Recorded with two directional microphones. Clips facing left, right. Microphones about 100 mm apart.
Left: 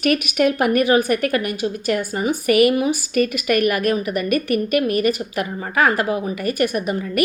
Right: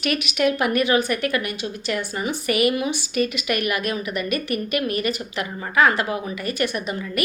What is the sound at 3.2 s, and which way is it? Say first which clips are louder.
A woman's voice: left 5 dB; 45° left (ahead or behind).